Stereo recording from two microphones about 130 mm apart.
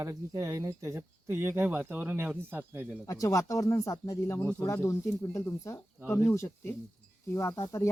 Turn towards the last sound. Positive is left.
turn(degrees=20)  # may be behind; listen again after turning